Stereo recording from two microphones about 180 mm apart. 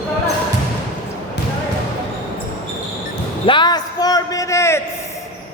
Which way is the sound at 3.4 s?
25° left (ahead or behind).